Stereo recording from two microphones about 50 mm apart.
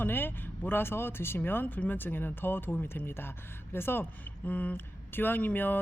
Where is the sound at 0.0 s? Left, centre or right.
Left.